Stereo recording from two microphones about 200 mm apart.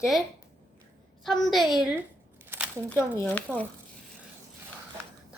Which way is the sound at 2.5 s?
10° right (ahead or behind).